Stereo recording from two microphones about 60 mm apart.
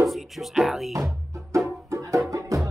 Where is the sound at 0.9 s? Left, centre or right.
Right.